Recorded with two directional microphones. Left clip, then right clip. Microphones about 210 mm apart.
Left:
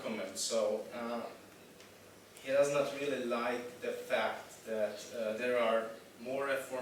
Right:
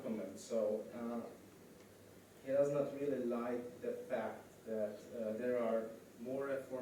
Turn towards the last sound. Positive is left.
turn(degrees=-10)  # may be behind; listen again after turning